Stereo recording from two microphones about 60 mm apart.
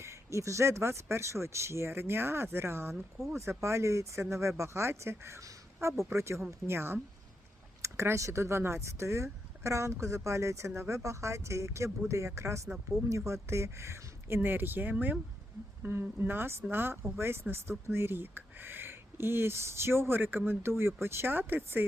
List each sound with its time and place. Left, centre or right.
0.0 s speech: right
2.9 s speech: centre
3.3 s speech: right
5.4 s speech: right
6.7 s speech: right